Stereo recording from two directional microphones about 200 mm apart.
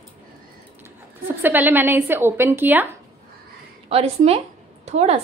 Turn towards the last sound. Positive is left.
turn(degrees=-30)  # may be behind; listen again after turning